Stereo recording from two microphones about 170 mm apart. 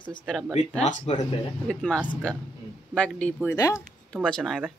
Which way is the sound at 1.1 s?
35° left (ahead or behind).